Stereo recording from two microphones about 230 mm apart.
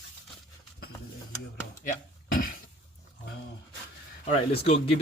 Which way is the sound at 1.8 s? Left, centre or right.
Left.